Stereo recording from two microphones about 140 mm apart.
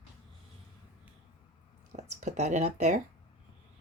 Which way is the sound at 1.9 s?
55° right (ahead or behind).